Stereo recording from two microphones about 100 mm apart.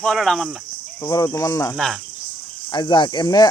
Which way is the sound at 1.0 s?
45° left (ahead or behind).